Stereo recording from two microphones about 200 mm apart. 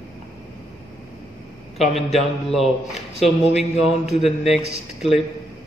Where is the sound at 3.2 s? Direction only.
30° left (ahead or behind).